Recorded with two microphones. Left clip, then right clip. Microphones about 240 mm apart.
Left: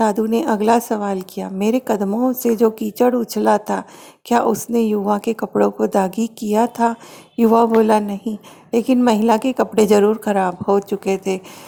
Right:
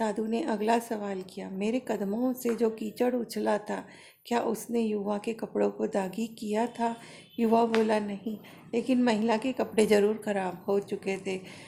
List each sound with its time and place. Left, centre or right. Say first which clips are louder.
0.0 s a woman's voice: left 13 dB; left